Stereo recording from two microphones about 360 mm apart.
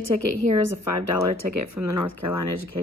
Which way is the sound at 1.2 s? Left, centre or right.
Right.